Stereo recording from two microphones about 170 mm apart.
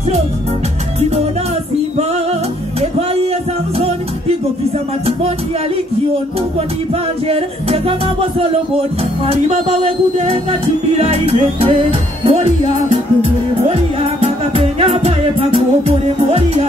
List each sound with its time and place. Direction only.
7.2 s music: 35° right (ahead or behind)
9.2 s music: 35° right (ahead or behind)